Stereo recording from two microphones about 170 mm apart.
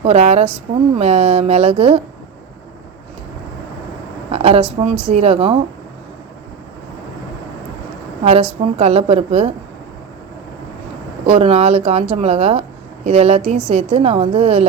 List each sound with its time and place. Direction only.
0.0 s speech: 40° right (ahead or behind)
4.3 s speech: 35° right (ahead or behind)
8.2 s speech: 35° right (ahead or behind)
11.3 s speech: 35° right (ahead or behind)